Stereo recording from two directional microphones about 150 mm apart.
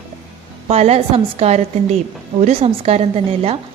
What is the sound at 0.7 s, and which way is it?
A woman's voice, 45° right (ahead or behind).